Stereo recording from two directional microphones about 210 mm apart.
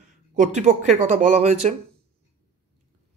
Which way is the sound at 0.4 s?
35° right (ahead or behind).